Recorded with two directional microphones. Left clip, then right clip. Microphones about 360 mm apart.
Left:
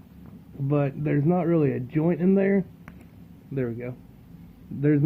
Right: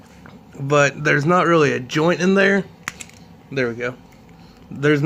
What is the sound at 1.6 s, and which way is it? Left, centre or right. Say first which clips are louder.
Speech: right 8 dB; right.